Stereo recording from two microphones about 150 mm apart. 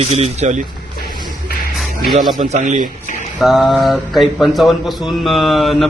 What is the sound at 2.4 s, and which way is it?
Speech, 55° right (ahead or behind).